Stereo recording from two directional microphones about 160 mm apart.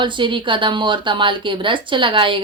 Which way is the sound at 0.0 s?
30° right (ahead or behind).